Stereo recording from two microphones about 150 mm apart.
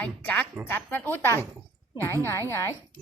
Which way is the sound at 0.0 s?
10° left (ahead or behind).